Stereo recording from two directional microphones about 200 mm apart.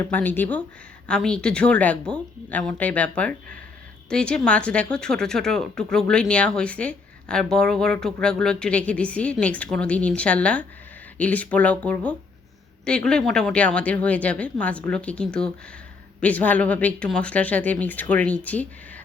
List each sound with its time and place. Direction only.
0.0 s speech: 10° left (ahead or behind)